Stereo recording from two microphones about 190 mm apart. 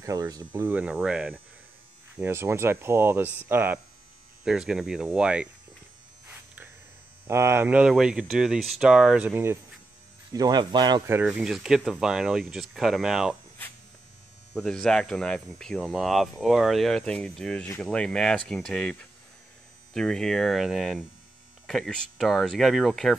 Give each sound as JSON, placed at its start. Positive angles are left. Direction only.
{"t": 0.0, "sound": "speech", "side_deg": -15}
{"t": 0.7, "sound": "speech", "side_deg": -10}
{"t": 7.2, "sound": "speech", "side_deg": -15}
{"t": 11.1, "sound": "speech", "side_deg": -5}
{"t": 14.5, "sound": "speech", "side_deg": 0}